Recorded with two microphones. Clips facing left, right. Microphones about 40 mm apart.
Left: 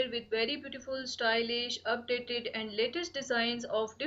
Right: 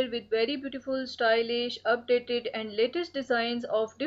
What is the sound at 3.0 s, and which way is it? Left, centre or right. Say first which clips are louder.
Speech: right 6 dB; right.